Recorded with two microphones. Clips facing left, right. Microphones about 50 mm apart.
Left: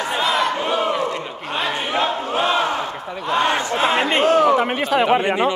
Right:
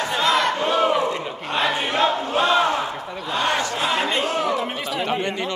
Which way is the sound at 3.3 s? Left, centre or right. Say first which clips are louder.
Left 3 dB; left.